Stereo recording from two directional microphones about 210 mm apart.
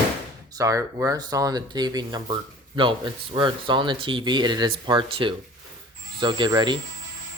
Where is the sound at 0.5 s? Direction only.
15° right (ahead or behind).